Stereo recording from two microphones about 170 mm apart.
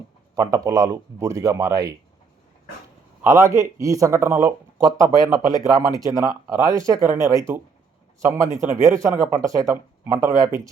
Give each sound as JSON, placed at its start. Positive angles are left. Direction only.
{"t": 0.3, "sound": "speech", "side_deg": -20}
{"t": 3.2, "sound": "speech", "side_deg": -20}